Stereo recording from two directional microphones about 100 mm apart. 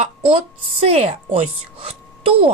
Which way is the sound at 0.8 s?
90° right.